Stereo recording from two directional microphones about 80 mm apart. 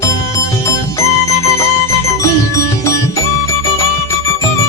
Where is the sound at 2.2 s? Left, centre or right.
Left.